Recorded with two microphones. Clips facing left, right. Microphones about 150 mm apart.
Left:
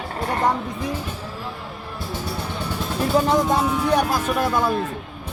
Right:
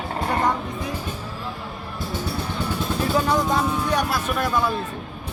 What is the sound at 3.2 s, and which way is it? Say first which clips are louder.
Speech: left 3 dB; 25° left (ahead or behind).